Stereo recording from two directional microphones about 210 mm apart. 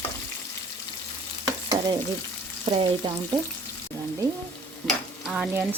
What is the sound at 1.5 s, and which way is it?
Stir, 20° right (ahead or behind).